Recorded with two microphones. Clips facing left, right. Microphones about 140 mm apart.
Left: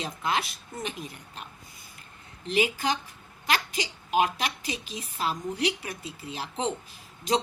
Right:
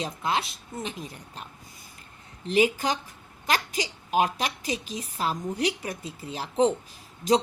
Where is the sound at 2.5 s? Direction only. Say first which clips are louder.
Right 3 dB; 40° right (ahead or behind).